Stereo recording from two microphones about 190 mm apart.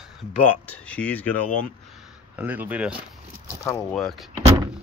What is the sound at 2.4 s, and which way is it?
Speech, 10° right (ahead or behind).